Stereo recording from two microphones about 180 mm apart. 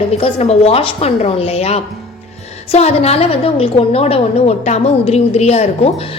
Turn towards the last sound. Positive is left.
turn(degrees=35)  # may be behind; listen again after turning